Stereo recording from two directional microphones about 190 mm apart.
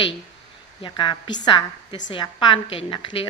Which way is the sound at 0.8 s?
25° left (ahead or behind).